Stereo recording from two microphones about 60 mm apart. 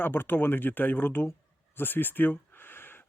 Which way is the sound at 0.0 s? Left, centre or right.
Left.